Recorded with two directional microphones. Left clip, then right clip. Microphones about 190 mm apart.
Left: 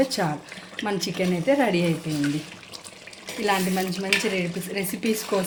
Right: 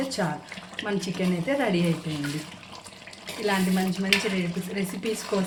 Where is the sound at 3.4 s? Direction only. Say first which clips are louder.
Left 2 dB; 40° left (ahead or behind).